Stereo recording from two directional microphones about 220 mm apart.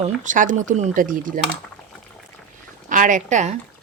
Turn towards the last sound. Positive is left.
turn(degrees=-35)  # may be behind; listen again after turning